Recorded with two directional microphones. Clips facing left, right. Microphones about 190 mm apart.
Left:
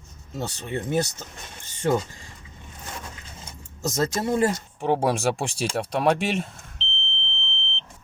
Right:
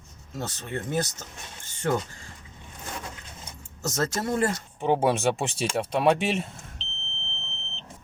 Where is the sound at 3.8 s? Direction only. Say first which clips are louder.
Left 3 dB; 15° left (ahead or behind).